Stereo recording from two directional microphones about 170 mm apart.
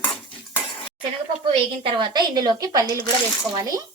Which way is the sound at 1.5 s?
30° right (ahead or behind).